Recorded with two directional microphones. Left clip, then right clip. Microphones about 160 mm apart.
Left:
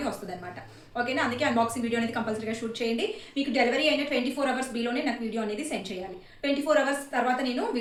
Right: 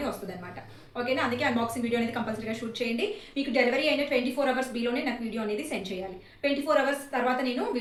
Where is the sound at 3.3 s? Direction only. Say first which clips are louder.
Even; 25° left (ahead or behind).